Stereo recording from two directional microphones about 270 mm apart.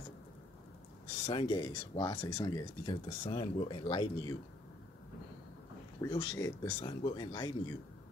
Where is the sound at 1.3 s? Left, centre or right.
Centre.